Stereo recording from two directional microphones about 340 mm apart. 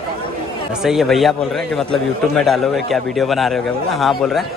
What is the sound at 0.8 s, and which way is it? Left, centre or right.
A man's voice, centre.